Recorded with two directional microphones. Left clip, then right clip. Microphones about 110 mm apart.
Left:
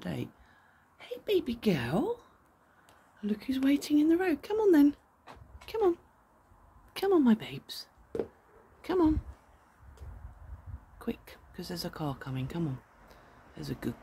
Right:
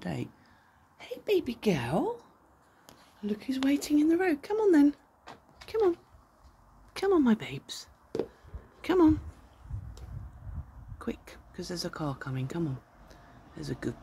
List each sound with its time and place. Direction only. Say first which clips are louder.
0.0 s a sound: right 1 dB; 15° left (ahead or behind)
0.9 s a woman's voice: right 1 dB; 5° left (ahead or behind); by 5.9 s 25° left (ahead or behind)
6.9 s speech: right 1 dB; 10° left (ahead or behind)
7.2 s speech: even; centre (ahead or behind)
11.0 s speech: right 1 dB; 5° left (ahead or behind)
13.1 s a sound: right 3 dB; 15° left (ahead or behind)